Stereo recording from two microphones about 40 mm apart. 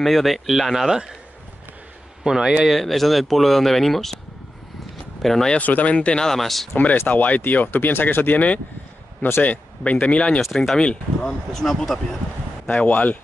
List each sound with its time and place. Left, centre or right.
0.0 s speech: centre
0.8 s a man's voice: centre
2.2 s a man's voice: centre
2.6 s speech: centre
5.2 s speech: centre
5.6 s speech: left
5.9 s speech: left
6.2 s speech: centre
7.1 s speech: left
9.4 s speech: left
10.4 s speech: centre
10.8 s speech: left
11.5 s speech: centre
12.8 s speech: left